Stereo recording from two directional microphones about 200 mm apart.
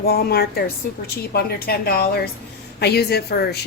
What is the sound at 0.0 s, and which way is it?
A woman's voice, 50° left (ahead or behind).